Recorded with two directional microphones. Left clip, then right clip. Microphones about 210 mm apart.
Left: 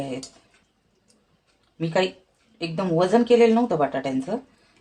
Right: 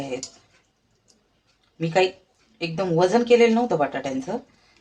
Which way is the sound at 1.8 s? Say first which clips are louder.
Right 2 dB; 15° left (ahead or behind).